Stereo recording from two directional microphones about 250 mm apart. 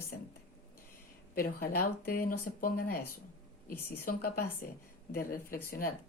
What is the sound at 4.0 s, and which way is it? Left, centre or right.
Speech, left.